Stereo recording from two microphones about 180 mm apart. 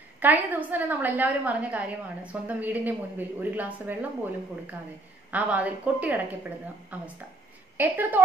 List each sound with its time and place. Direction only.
0.2 s a woman's voice: 10° right (ahead or behind)